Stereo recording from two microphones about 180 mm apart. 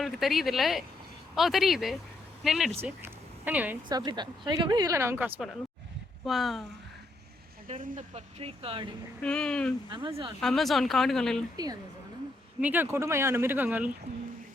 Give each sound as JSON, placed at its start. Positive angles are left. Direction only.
{"t": 0.0, "sound": "speech", "side_deg": 0}
{"t": 2.8, "sound": "a sound", "side_deg": -10}
{"t": 3.8, "sound": "speech", "side_deg": -20}
{"t": 6.2, "sound": "speech", "side_deg": 0}
{"t": 7.8, "sound": "speech", "side_deg": -40}
{"t": 9.2, "sound": "speech", "side_deg": 5}
{"t": 9.9, "sound": "speech", "side_deg": -25}
{"t": 10.4, "sound": "speech", "side_deg": 0}
{"t": 11.5, "sound": "speech", "side_deg": -20}
{"t": 12.5, "sound": "speech", "side_deg": -10}